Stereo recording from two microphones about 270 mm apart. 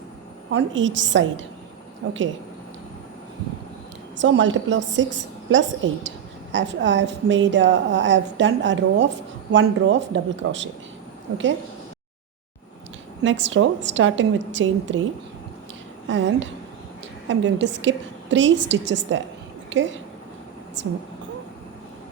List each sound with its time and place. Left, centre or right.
0.5 s a woman's voice: right
4.2 s a woman's voice: right
13.2 s a woman's voice: right
16.0 s a woman's voice: right